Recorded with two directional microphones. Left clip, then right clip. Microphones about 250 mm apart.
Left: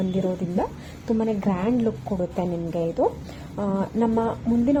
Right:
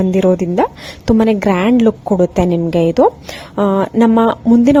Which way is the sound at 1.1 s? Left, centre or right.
Right.